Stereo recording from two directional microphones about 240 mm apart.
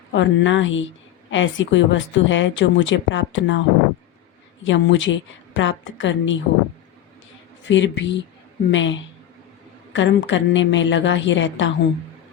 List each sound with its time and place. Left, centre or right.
0.1 s speech: left
4.6 s speech: left
7.6 s speech: left